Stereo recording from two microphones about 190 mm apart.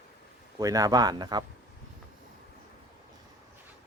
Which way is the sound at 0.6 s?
20° right (ahead or behind).